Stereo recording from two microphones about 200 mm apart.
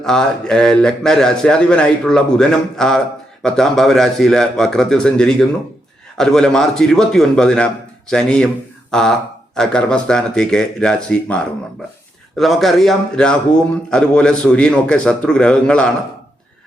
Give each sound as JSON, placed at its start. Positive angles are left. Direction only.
{"t": 0.0, "sound": "a man's voice", "side_deg": 5}